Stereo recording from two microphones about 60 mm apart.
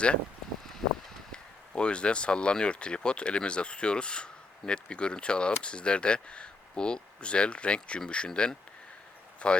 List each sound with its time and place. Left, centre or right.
1.3 s speech: centre